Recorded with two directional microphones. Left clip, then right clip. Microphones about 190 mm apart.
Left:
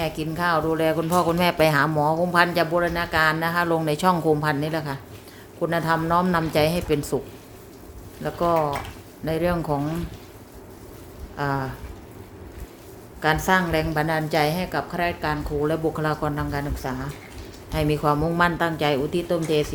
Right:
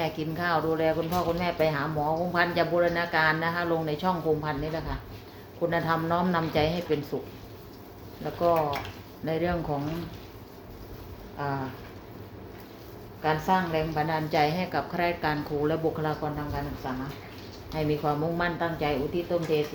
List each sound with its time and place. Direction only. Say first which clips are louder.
0.0 s speech: left 5 dB; 25° left (ahead or behind)
1.1 s speech: left 7 dB; 50° left (ahead or behind)
5.6 s a woman's voice: left 4 dB; 30° left (ahead or behind)
8.2 s a woman's voice: left 2 dB; 40° left (ahead or behind)
9.2 s speech: left 5 dB; 30° left (ahead or behind)
11.4 s speech: left 6 dB; 45° left (ahead or behind)
13.2 s a woman's voice: left 5 dB; 50° left (ahead or behind); by 15.8 s 20° left (ahead or behind)
16.0 s a woman's voice: left 5 dB; 35° left (ahead or behind)
16.8 s speech: left 3 dB; 55° left (ahead or behind)
17.7 s speech: left 6 dB; 40° left (ahead or behind)